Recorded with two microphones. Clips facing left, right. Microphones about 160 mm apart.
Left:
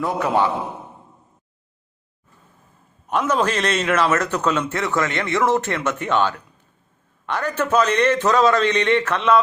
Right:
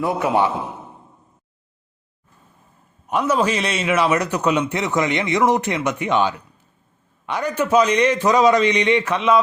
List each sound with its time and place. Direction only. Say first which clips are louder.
0.0 s a man's voice: right 1 dB; 15° right (ahead or behind)
3.1 s a man's voice: right 1 dB; 10° right (ahead or behind)